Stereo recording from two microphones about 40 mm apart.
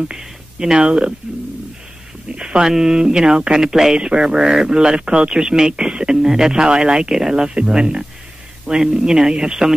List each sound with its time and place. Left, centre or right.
0.1 s speech: centre
0.7 s speech: right
2.3 s speech: right
3.9 s speech: right